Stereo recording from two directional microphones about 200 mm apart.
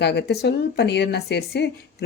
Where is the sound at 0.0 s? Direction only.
55° left (ahead or behind).